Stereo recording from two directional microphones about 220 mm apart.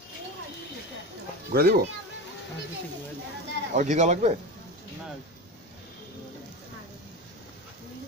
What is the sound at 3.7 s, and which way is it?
Speech, 35° right (ahead or behind).